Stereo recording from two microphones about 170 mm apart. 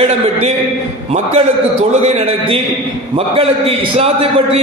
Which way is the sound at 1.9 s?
40° right (ahead or behind).